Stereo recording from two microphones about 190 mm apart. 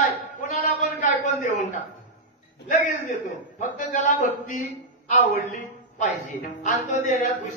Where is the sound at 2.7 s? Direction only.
40° left (ahead or behind).